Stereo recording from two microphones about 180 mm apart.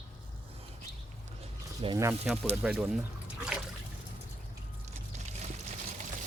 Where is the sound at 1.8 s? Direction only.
30° right (ahead or behind).